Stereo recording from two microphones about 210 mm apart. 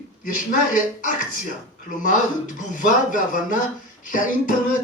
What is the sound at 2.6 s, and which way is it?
Speech, 40° left (ahead or behind).